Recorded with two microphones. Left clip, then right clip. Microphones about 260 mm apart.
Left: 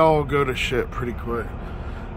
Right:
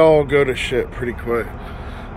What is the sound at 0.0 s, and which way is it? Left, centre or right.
Speech, centre.